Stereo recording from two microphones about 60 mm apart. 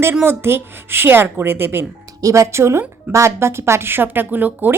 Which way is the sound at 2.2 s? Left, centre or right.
Right.